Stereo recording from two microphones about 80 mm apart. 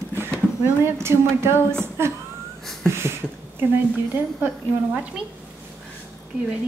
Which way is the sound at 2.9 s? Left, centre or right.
Right.